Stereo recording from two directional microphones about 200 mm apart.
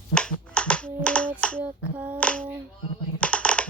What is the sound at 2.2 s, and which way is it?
Speech, 5° left (ahead or behind).